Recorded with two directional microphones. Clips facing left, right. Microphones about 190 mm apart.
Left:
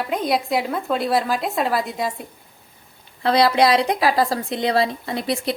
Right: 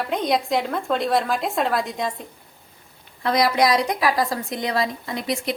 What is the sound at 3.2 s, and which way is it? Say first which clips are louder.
A woman's voice: left 3 dB; 30° left (ahead or behind).